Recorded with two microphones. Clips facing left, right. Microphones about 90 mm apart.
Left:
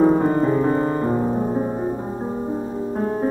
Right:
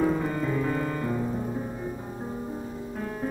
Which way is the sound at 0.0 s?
40° left (ahead or behind).